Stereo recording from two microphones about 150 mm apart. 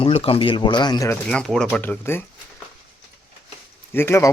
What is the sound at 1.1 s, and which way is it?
Speech, 5° left (ahead or behind).